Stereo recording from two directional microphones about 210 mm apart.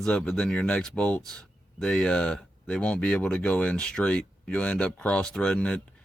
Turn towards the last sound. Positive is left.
turn(degrees=5)  # may be behind; listen again after turning